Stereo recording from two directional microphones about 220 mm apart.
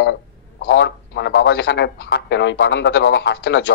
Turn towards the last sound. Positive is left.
turn(degrees=50)  # may be behind; listen again after turning